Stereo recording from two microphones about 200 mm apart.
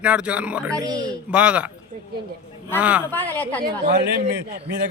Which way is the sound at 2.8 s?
5° right (ahead or behind).